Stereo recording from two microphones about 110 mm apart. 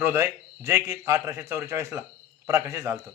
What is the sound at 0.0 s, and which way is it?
A man's voice, 20° right (ahead or behind).